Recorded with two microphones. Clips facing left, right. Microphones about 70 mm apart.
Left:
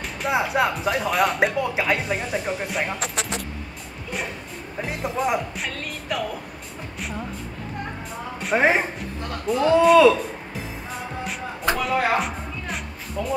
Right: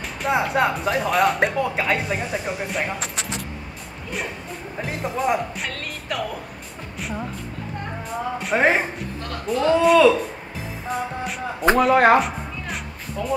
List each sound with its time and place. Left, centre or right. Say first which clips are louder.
0.2 s speech: right 1 dB; centre
4.8 s speech: right 2 dB; centre
7.0 s music: right 2 dB; centre
8.1 s speech: right 1 dB; centre
10.9 s music: right 6 dB; centre
11.7 s speech: right 7 dB; right
12.2 s music: right 3 dB; centre